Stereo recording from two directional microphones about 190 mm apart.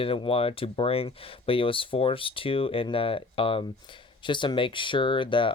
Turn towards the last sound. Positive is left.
turn(degrees=25)  # may be behind; listen again after turning